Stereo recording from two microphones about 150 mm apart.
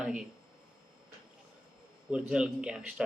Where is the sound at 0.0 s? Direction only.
5° right (ahead or behind).